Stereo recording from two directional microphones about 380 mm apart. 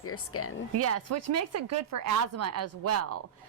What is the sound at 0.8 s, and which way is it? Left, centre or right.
Speech, right.